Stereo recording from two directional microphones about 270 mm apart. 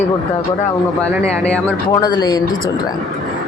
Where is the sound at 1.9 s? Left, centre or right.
Centre.